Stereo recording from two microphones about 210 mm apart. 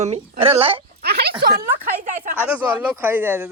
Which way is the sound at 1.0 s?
50° right (ahead or behind).